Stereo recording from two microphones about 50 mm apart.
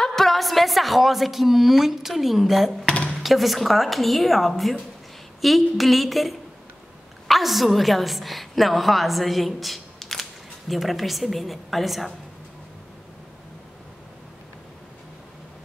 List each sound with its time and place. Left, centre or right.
0.0 s a woman's voice: centre
2.9 s a sound: left
3.2 s a woman's voice: centre